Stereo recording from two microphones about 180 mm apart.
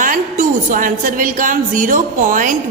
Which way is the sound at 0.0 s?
45° right (ahead or behind).